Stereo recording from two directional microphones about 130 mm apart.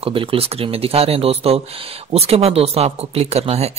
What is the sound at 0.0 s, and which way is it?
Speech, 45° right (ahead or behind).